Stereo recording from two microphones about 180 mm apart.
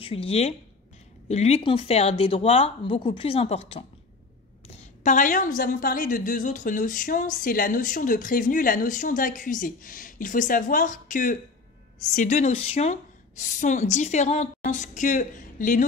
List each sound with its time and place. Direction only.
0.0 s a woman's voice: 35° left (ahead or behind)